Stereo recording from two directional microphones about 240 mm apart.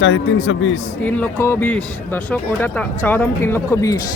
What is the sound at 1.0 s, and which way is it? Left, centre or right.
Speech, centre.